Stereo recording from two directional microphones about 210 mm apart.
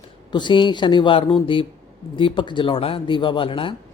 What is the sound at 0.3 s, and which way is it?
Speech, 20° left (ahead or behind).